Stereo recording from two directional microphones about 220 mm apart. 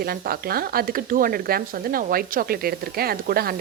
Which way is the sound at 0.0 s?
45° right (ahead or behind).